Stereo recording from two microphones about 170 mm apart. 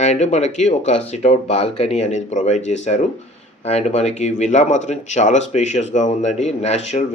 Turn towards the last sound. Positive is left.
turn(degrees=40)  # may be behind; listen again after turning